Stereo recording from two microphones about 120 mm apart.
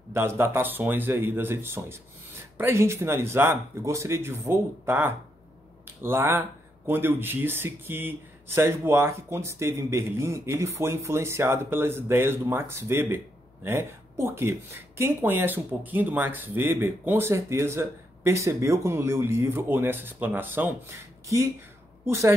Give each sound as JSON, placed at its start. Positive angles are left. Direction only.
{"t": 0.1, "sound": "speech", "side_deg": -20}